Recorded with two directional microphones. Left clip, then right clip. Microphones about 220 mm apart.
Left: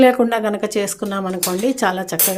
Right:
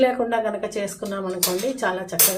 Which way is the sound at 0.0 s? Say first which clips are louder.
Left 6 dB; 50° left (ahead or behind).